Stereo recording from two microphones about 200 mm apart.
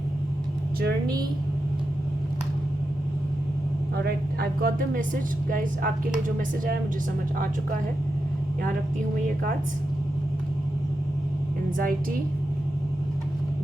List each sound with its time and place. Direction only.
3.9 s speech: 50° right (ahead or behind)